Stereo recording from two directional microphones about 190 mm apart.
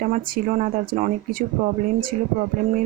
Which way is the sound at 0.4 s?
40° right (ahead or behind).